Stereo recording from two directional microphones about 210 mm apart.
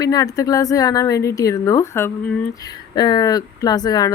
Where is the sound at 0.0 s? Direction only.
15° left (ahead or behind).